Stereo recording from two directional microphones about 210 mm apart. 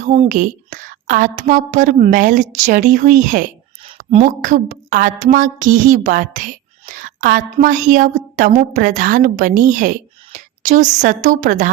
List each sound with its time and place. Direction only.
0.0 s a woman's voice: 35° right (ahead or behind)